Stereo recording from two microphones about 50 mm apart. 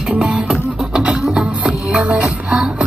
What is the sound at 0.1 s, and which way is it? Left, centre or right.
Music, centre.